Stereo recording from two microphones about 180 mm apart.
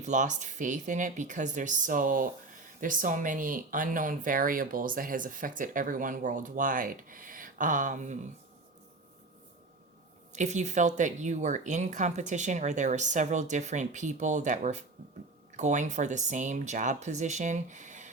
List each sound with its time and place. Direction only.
0.0 s speech: 40° right (ahead or behind)
10.3 s speech: 40° right (ahead or behind)